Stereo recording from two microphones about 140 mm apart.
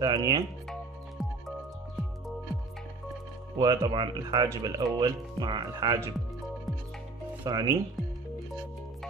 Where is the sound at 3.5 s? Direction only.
30° right (ahead or behind).